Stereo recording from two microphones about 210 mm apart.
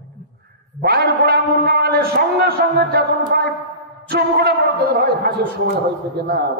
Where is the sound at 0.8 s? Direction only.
45° right (ahead or behind).